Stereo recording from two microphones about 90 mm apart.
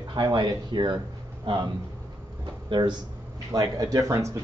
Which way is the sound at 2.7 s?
55° right (ahead or behind).